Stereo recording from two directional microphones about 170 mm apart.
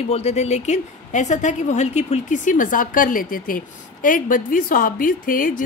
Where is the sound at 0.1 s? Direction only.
40° left (ahead or behind).